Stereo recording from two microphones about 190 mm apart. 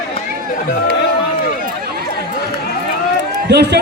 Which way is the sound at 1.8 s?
55° right (ahead or behind).